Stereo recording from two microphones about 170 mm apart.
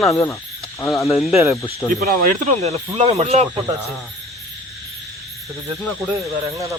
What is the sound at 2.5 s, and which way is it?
Speech, 40° right (ahead or behind).